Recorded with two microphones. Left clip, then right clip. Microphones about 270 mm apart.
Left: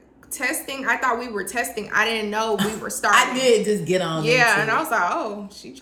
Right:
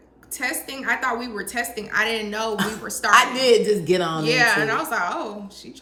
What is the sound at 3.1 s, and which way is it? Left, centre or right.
Speech, centre.